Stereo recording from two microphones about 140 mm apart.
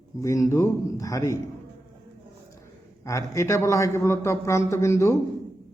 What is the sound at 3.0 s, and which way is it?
A man's voice, 20° left (ahead or behind).